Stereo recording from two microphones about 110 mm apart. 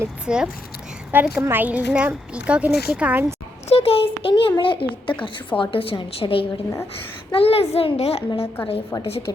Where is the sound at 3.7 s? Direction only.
65° left (ahead or behind).